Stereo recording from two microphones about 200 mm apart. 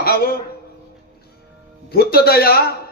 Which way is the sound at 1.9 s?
50° left (ahead or behind).